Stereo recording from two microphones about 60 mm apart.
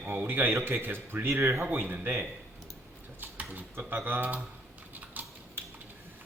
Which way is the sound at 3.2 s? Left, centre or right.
Right.